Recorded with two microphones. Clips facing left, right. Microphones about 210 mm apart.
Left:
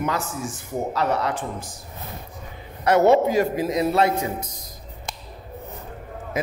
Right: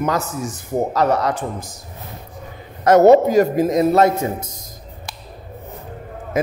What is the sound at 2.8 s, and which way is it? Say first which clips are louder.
A man's voice: right 6 dB; 40° right (ahead or behind).